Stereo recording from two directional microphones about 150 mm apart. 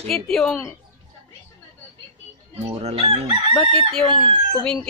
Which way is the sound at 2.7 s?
45° right (ahead or behind).